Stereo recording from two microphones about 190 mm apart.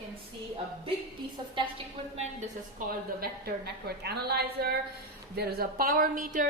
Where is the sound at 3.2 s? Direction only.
55° right (ahead or behind).